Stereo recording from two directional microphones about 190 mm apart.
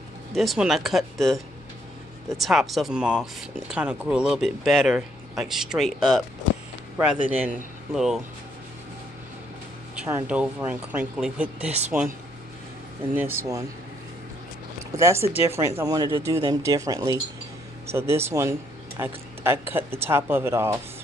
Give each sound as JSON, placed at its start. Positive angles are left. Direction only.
{"t": 0.3, "sound": "speech", "side_deg": 0}
{"t": 10.0, "sound": "speech", "side_deg": -10}
{"t": 13.1, "sound": "speech", "side_deg": -10}
{"t": 15.0, "sound": "speech", "side_deg": -15}